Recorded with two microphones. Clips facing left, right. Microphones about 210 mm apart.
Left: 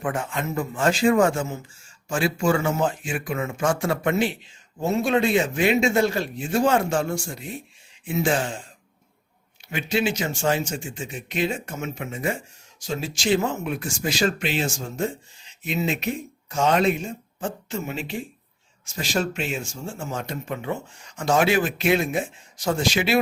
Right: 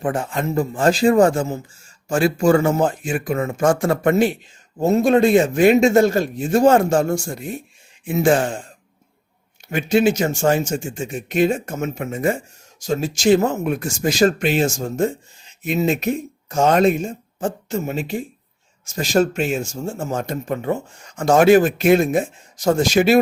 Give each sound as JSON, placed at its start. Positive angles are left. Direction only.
{"t": 0.0, "sound": "speech", "side_deg": -35}
{"t": 9.6, "sound": "speech", "side_deg": -50}